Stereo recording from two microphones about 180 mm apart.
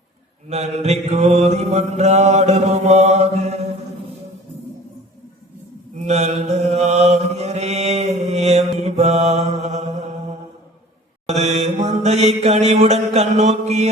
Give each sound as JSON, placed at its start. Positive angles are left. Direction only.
{"t": 0.5, "sound": "mantra", "side_deg": -40}
{"t": 6.1, "sound": "mantra", "side_deg": -40}
{"t": 11.3, "sound": "mantra", "side_deg": -40}